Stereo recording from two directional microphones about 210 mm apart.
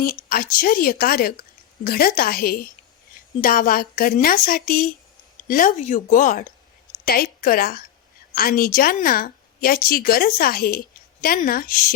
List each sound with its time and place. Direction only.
0.0 s a woman's voice: 45° left (ahead or behind)